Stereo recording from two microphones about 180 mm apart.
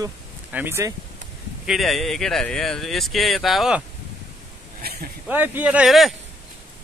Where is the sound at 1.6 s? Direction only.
Centre (ahead or behind).